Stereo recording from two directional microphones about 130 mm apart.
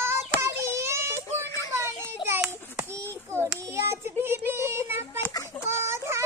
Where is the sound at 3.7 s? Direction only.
20° right (ahead or behind).